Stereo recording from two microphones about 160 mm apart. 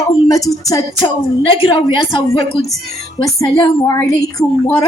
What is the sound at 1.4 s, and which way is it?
Speech, 30° left (ahead or behind).